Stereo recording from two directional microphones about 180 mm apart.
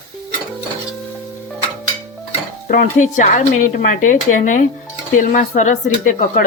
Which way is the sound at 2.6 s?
45° left (ahead or behind).